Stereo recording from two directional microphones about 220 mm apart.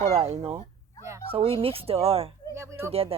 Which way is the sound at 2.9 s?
25° right (ahead or behind).